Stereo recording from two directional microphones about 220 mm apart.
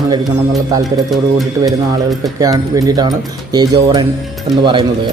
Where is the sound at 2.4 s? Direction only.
15° right (ahead or behind).